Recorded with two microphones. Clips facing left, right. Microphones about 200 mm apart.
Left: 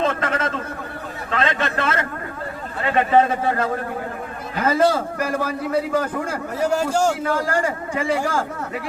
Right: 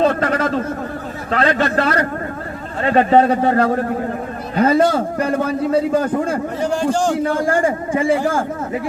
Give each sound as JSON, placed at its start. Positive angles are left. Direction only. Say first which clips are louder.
{"t": 0.0, "sound": "a sound", "louder": "right 6 dB", "side_deg": -40}
{"t": 1.3, "sound": "a man's voice", "louder": "right 6 dB", "side_deg": -40}
{"t": 6.6, "sound": "a man's voice", "louder": "even", "side_deg": 5}
{"t": 7.3, "sound": "a man's voice", "louder": "right 5 dB", "side_deg": -25}